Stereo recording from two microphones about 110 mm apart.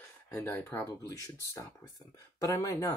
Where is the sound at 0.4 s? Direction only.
20° left (ahead or behind).